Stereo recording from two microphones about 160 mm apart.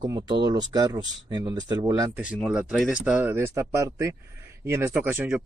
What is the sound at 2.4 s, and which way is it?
A man's voice, 5° right (ahead or behind).